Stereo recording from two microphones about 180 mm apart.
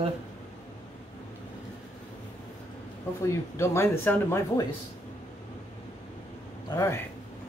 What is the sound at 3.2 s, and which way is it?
Speech, 15° left (ahead or behind).